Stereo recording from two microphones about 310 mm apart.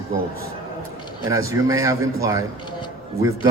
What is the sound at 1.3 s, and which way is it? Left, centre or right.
A man's voice, centre.